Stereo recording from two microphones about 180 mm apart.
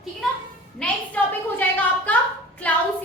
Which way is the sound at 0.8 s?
10° left (ahead or behind).